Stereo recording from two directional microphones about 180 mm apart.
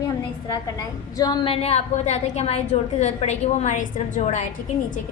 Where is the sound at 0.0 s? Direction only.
20° left (ahead or behind).